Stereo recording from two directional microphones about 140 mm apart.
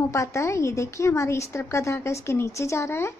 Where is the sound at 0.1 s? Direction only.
20° left (ahead or behind).